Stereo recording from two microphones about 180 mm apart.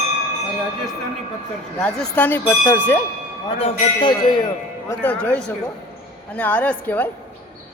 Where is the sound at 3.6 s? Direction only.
30° left (ahead or behind).